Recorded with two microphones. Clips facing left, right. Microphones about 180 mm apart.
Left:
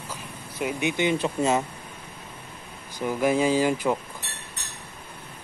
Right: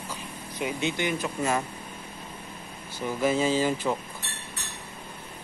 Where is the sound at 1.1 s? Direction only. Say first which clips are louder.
Left 4 dB; 30° left (ahead or behind).